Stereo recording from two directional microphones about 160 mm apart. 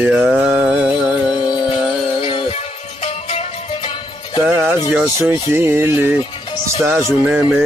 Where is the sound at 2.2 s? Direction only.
35° left (ahead or behind).